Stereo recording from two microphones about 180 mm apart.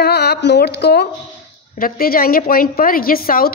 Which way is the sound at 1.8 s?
55° left (ahead or behind).